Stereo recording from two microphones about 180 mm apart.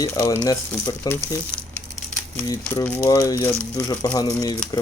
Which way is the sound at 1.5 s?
5° left (ahead or behind).